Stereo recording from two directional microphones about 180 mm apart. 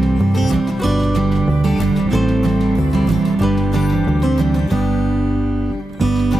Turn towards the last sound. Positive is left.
turn(degrees=0)  # may be behind; listen again after turning